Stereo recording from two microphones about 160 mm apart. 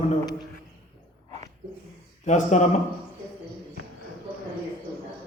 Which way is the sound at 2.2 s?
45° left (ahead or behind).